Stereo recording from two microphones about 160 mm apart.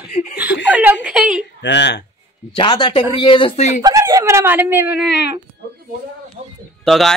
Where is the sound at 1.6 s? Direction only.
90° left.